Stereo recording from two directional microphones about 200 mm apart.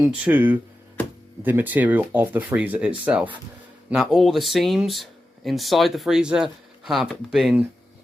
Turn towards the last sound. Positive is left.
turn(degrees=0)  # may be behind; listen again after turning